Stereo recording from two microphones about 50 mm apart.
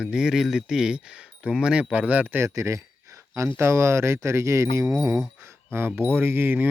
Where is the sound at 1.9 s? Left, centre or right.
Right.